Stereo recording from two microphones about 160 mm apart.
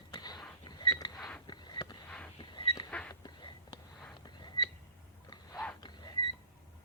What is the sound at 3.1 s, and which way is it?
Whispering, 25° left (ahead or behind).